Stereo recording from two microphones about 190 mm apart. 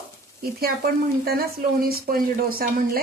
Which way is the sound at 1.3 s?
50° right (ahead or behind).